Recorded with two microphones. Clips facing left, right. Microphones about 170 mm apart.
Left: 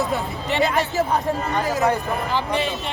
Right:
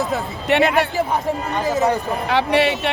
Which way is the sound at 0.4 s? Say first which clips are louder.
Right 5 dB; 65° right (ahead or behind).